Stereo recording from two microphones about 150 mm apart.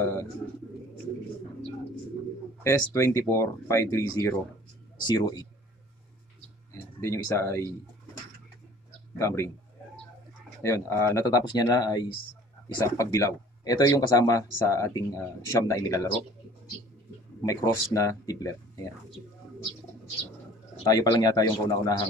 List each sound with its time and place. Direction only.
0.0 s speech: 20° left (ahead or behind)
2.6 s speech: 20° left (ahead or behind)
6.7 s a sound: 20° left (ahead or behind)
7.2 s speech: 20° left (ahead or behind)
9.2 s speech: 20° left (ahead or behind)
10.6 s speech: 20° left (ahead or behind)
17.5 s speech: 20° left (ahead or behind)
20.9 s speech: 25° left (ahead or behind)